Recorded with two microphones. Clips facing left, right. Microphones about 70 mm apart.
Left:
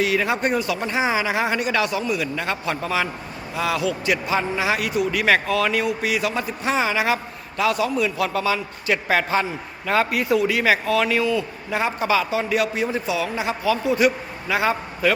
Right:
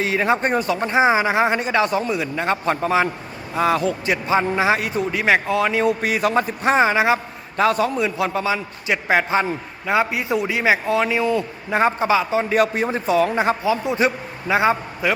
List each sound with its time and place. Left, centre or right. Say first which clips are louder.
0.0 s a man's voice: right 2 dB; right
1.9 s a man's voice: right 3 dB; right
2.1 s a man's voice: right 3 dB; right
5.8 s a man's voice: right 4 dB; right
7.9 s a man's voice: right 1 dB; right
13.7 s a man's voice: even; right